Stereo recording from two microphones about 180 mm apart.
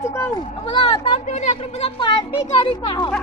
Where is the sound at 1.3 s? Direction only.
40° left (ahead or behind).